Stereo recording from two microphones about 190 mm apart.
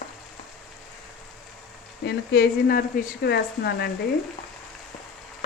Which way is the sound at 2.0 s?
55° left (ahead or behind).